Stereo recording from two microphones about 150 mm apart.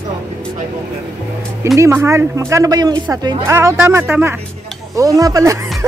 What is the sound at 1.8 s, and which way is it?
A woman's voice, 20° right (ahead or behind).